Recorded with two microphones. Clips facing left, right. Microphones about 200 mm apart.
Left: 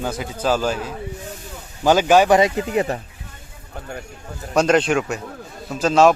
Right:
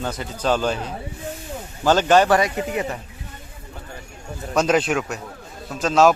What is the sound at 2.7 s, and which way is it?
Speech, 35° left (ahead or behind).